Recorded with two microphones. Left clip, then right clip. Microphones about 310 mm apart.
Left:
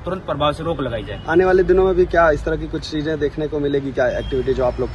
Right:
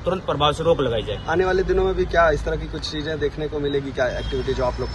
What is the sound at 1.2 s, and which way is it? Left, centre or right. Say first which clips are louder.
Speech: left 7 dB; left.